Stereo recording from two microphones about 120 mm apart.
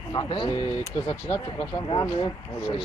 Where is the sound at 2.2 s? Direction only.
40° left (ahead or behind).